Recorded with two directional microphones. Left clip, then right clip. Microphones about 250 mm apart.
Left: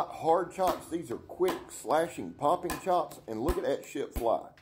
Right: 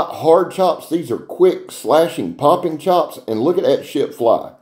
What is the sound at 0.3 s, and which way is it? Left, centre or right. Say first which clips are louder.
Speech: right 15 dB; left.